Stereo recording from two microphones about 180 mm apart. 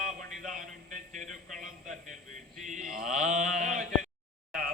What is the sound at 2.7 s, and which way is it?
Mantra, 45° right (ahead or behind).